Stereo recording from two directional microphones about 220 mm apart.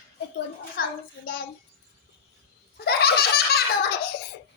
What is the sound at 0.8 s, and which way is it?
Speech, 40° left (ahead or behind).